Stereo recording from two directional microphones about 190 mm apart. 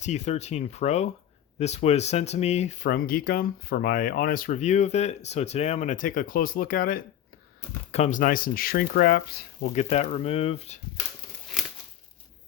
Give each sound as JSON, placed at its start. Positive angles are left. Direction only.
{"t": 0.0, "sound": "speech", "side_deg": 35}
{"t": 7.9, "sound": "speech", "side_deg": 35}
{"t": 9.7, "sound": "speech", "side_deg": 35}